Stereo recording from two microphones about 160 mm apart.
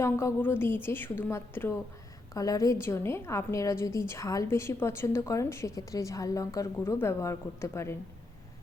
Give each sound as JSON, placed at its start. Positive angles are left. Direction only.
{"t": 0.0, "sound": "a woman's voice", "side_deg": 15}